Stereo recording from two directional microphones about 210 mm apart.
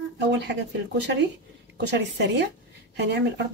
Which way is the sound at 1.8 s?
55° right (ahead or behind).